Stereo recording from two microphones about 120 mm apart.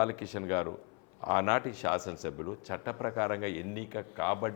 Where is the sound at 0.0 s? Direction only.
25° left (ahead or behind).